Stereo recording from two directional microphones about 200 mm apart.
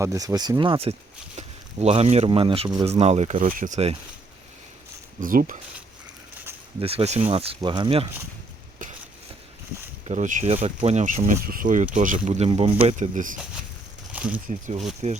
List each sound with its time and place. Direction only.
0.0 s speech: 15° right (ahead or behind); by 3.9 s 35° right (ahead or behind)
5.2 s speech: 45° right (ahead or behind)
6.7 s speech: 30° right (ahead or behind)
10.1 s speech: 35° right (ahead or behind)
14.1 s a sound: 5° right (ahead or behind)
14.4 s speech: 35° right (ahead or behind)